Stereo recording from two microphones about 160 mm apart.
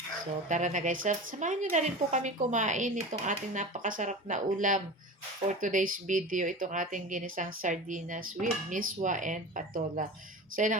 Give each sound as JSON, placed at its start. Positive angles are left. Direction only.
{"t": 0.4, "sound": "speech", "side_deg": -50}